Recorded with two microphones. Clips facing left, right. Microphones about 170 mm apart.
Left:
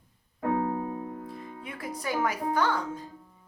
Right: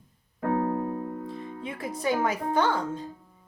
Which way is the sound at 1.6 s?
25° right (ahead or behind).